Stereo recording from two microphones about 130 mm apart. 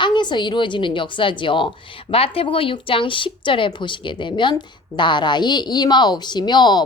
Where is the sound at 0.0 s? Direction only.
35° left (ahead or behind).